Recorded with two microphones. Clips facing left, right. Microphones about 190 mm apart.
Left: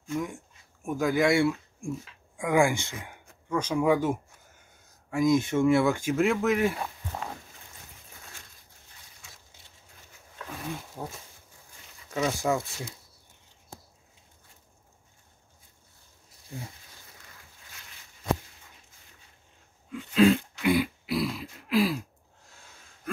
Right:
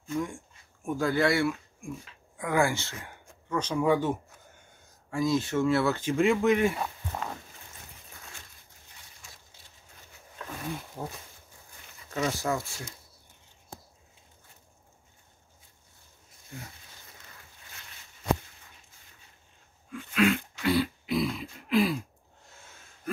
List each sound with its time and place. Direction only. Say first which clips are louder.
0.1 s speech: even; 5° left (ahead or behind)
12.1 s speech: left 2 dB; 5° left (ahead or behind)
19.9 s dog: left 5 dB; 30° left (ahead or behind)
20.6 s speech: left 1 dB; 15° left (ahead or behind)
21.0 s grunt: right 1 dB; centre (ahead or behind)